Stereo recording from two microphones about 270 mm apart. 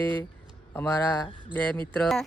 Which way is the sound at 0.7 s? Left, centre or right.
Centre.